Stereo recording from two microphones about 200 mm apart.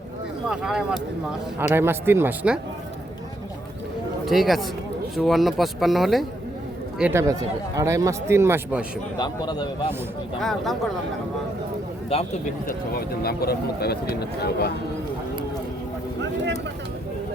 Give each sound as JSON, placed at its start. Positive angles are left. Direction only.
{"t": 0.4, "sound": "speech", "side_deg": -5}
{"t": 4.3, "sound": "speech", "side_deg": 0}
{"t": 7.0, "sound": "speech", "side_deg": -15}
{"t": 9.1, "sound": "a man's voice", "side_deg": 20}
{"t": 10.4, "sound": "speech", "side_deg": 0}
{"t": 12.1, "sound": "a man's voice", "side_deg": 30}
{"t": 13.2, "sound": "speech", "side_deg": 50}